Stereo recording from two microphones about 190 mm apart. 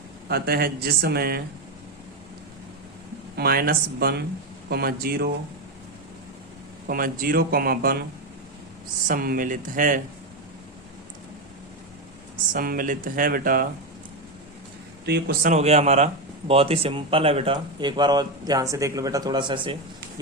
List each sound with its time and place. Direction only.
0.3 s speech: 55° right (ahead or behind)
3.3 s speech: 55° right (ahead or behind)
6.8 s speech: 50° right (ahead or behind)
9.0 s speech: 50° right (ahead or behind)
12.5 s speech: 50° right (ahead or behind)
15.0 s speech: 60° right (ahead or behind)
15.4 s a man's voice: 35° right (ahead or behind)